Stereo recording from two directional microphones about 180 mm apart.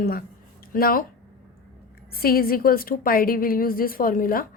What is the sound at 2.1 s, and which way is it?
A woman's voice, 55° left (ahead or behind).